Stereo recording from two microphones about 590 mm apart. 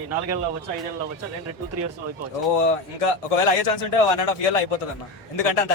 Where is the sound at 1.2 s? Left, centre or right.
Right.